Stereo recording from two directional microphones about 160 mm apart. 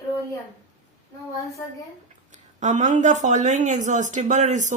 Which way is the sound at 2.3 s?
50° right (ahead or behind).